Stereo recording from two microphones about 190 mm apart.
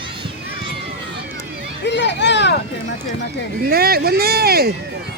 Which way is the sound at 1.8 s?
65° left (ahead or behind).